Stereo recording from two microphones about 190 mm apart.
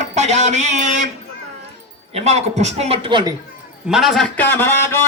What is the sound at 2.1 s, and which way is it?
A man's voice, 35° right (ahead or behind).